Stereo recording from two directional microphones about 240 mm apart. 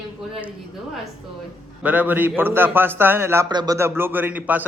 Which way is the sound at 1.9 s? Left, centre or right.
Centre.